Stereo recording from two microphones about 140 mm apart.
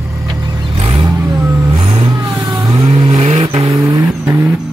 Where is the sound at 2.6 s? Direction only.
25° right (ahead or behind).